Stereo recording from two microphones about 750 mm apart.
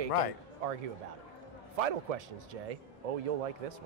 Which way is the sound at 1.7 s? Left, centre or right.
Right.